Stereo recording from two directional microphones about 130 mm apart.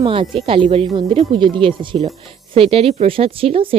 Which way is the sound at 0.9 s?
30° right (ahead or behind).